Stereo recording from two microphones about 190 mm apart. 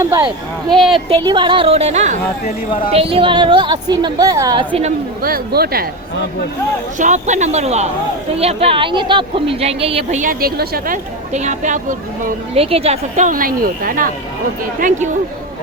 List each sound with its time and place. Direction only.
0.0 s speech: 15° right (ahead or behind)
0.8 s speech: centre (ahead or behind)
1.1 s a woman's voice: 25° right (ahead or behind)
5.2 s a woman's voice: 55° right (ahead or behind)
7.0 s a woman's voice: 40° right (ahead or behind)
12.5 s a woman's voice: 30° right (ahead or behind)